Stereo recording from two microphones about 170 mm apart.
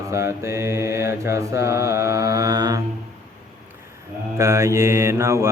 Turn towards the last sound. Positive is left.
turn(degrees=-15)  # may be behind; listen again after turning